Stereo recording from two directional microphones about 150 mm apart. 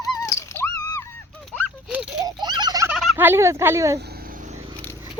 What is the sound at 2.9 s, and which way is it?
Gobble, centre (ahead or behind).